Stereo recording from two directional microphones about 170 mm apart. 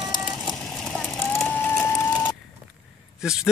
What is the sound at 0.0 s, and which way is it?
Vehicle, centre (ahead or behind).